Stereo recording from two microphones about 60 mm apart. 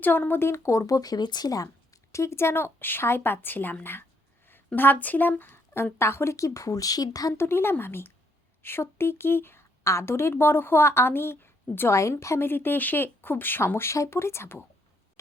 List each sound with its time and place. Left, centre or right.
0.0 s a woman's voice: left
7.3 s speech: left
9.8 s speech: left